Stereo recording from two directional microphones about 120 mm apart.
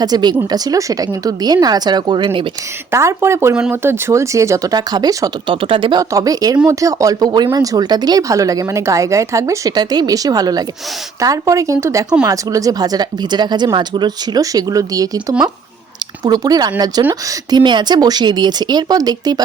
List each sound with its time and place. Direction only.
0.0 s speech: 35° right (ahead or behind)
2.9 s speech: 25° right (ahead or behind)
5.5 s speech: 45° right (ahead or behind)
6.0 s speech: 30° right (ahead or behind)